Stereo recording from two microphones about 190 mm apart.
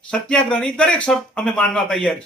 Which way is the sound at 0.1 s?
5° left (ahead or behind).